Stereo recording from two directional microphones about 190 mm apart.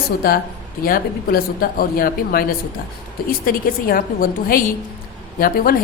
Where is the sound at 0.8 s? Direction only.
50° left (ahead or behind).